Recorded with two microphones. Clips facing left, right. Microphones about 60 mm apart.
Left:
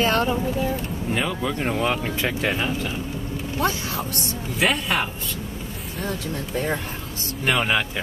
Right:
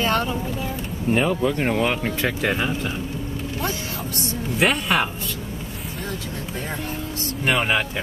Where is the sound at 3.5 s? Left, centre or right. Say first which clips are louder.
Left 5 dB; left.